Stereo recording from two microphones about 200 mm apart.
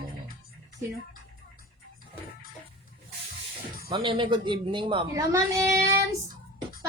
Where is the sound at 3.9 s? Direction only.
25° right (ahead or behind).